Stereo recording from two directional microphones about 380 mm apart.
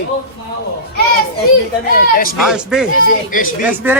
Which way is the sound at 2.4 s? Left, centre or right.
Centre.